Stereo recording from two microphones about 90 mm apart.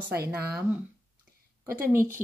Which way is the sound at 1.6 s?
30° right (ahead or behind).